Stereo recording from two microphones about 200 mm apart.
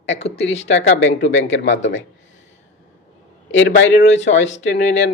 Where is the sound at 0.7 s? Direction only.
65° left (ahead or behind).